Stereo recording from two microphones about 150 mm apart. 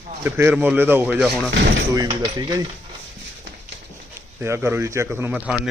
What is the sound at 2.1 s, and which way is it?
Speech, 30° right (ahead or behind).